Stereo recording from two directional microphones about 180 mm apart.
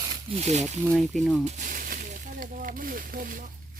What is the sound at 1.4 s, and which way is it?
Speech, 45° right (ahead or behind).